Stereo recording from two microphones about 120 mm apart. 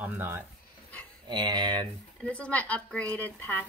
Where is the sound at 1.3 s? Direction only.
40° right (ahead or behind).